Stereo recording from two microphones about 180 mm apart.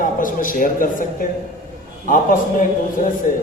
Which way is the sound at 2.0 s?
50° left (ahead or behind).